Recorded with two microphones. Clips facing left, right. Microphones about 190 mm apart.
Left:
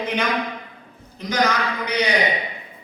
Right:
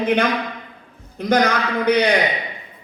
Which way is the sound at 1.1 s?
55° right (ahead or behind).